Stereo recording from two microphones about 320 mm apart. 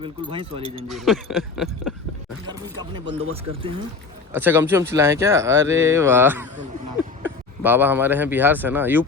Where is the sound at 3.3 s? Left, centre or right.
Centre.